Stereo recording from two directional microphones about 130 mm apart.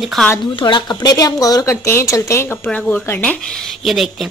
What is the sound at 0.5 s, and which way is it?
Speech, 35° left (ahead or behind).